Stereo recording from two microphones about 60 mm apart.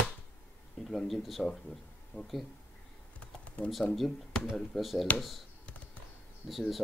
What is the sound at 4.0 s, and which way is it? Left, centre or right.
Speech, centre.